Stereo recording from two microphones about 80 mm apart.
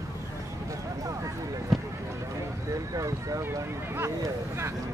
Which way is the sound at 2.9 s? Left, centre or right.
Right.